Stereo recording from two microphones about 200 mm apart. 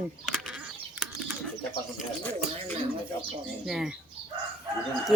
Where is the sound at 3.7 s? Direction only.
5° right (ahead or behind).